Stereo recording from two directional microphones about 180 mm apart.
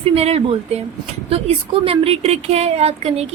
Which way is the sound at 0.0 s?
35° right (ahead or behind).